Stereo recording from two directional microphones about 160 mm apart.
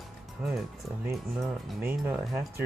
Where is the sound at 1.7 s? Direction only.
10° right (ahead or behind).